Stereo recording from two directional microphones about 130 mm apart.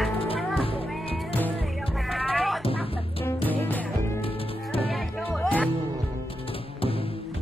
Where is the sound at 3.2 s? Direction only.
15° left (ahead or behind).